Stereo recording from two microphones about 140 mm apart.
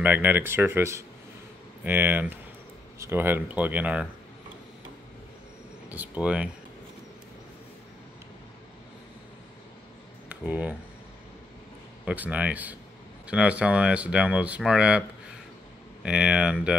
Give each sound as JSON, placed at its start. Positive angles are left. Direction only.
{"t": 0.0, "sound": "speech", "side_deg": -10}
{"t": 5.9, "sound": "speech", "side_deg": -10}
{"t": 10.2, "sound": "speech", "side_deg": -10}
{"t": 12.0, "sound": "speech", "side_deg": -10}